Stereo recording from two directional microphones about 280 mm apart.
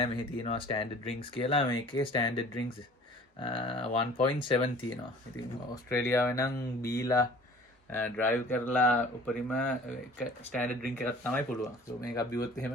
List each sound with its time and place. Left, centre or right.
0.0 s speech: centre